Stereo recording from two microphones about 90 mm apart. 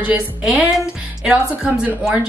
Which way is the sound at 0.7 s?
5° right (ahead or behind).